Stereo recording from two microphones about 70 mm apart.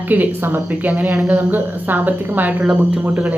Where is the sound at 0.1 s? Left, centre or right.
Right.